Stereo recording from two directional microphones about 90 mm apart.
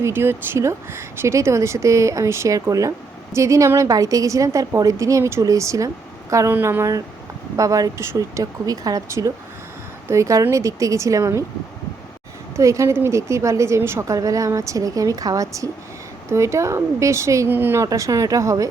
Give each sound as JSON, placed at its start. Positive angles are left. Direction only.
{"t": 0.0, "sound": "a woman's voice", "side_deg": -25}
{"t": 6.5, "sound": "a woman's voice", "side_deg": -25}
{"t": 12.5, "sound": "a woman's voice", "side_deg": -35}
{"t": 17.8, "sound": "a woman's voice", "side_deg": -40}